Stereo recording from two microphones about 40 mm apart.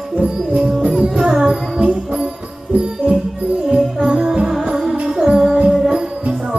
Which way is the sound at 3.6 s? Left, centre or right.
Centre.